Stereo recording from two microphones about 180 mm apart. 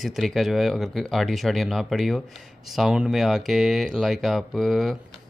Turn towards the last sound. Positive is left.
turn(degrees=0)  # may be behind; listen again after turning